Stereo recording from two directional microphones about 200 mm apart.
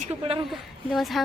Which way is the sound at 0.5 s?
Centre (ahead or behind).